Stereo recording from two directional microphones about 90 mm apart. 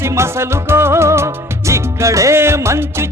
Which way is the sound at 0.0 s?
30° right (ahead or behind).